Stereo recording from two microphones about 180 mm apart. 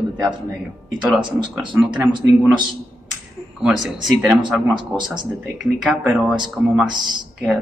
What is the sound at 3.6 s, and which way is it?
Speech, 5° right (ahead or behind).